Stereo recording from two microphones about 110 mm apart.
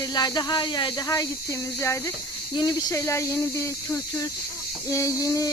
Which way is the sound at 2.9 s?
25° left (ahead or behind).